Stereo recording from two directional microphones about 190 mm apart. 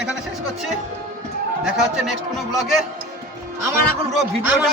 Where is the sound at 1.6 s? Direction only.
5° right (ahead or behind).